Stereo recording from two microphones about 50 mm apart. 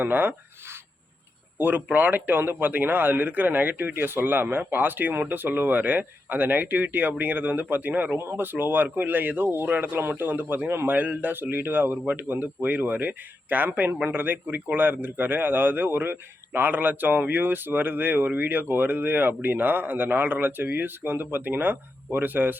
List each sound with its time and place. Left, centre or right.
0.0 s speech: right
1.5 s speech: right
8.2 s speech: right
8.4 s speech: right